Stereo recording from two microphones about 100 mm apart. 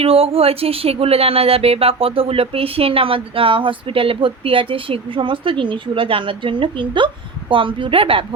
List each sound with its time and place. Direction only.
0.0 s speech: 75° right (ahead or behind)